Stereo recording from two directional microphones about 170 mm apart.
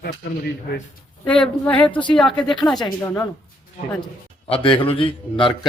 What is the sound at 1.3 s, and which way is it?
Speech, 5° left (ahead or behind).